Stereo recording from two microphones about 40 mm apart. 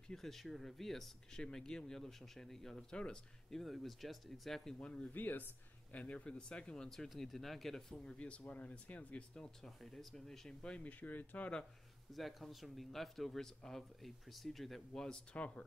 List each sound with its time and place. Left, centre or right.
0.1 s speech: centre
2.9 s speech: centre
3.4 s speech: centre
4.7 s speech: left
5.1 s speech: left
5.9 s speech: left
6.9 s speech: centre
8.2 s speech: left
9.1 s speech: left
9.6 s speech: centre
10.8 s speech: left
12.1 s speech: centre
15.3 s speech: left